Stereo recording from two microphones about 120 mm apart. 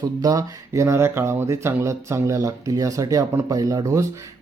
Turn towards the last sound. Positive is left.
turn(degrees=-25)  # may be behind; listen again after turning